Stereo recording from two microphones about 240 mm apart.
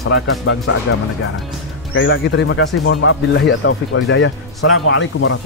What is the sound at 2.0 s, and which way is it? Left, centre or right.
A man's voice, left.